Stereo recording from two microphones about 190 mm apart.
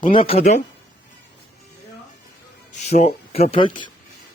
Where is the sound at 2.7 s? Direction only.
35° left (ahead or behind).